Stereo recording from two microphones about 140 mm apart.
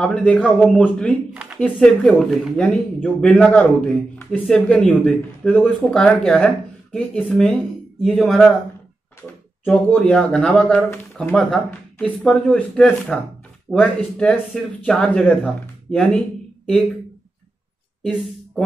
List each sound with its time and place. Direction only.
0.0 s a man's voice: 10° left (ahead or behind)
1.3 s a sound: 10° right (ahead or behind)
1.6 s a man's voice: 5° left (ahead or behind)
9.7 s a man's voice: 10° left (ahead or behind)